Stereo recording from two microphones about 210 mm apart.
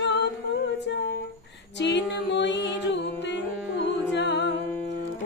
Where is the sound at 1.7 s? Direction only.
55° left (ahead or behind).